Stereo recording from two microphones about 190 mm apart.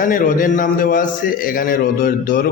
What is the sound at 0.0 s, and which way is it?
A man's voice, 45° left (ahead or behind).